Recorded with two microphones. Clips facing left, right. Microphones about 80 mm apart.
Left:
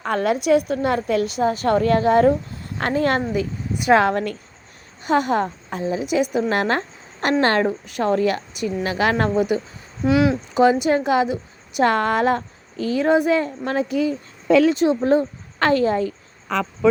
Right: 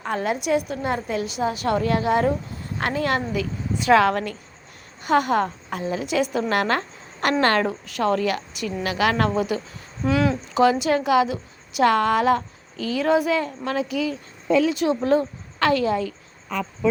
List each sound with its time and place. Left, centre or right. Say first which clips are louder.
0.0 s a woman's voice: left 4 dB; left
10.1 s speech: left 3 dB; centre
10.5 s a woman's voice: left 1 dB; left
16.5 s speech: left 5 dB; left